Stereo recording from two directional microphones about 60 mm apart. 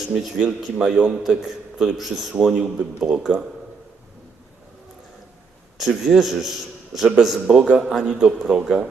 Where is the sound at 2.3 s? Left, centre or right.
Centre.